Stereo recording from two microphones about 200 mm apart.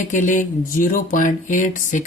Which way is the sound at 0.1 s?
40° left (ahead or behind).